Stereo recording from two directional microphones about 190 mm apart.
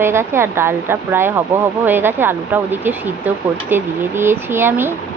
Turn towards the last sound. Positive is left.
turn(degrees=-10)  # may be behind; listen again after turning